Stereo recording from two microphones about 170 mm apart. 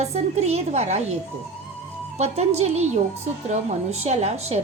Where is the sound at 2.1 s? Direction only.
40° right (ahead or behind).